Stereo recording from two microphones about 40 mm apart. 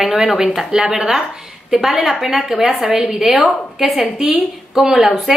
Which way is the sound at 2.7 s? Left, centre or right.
Right.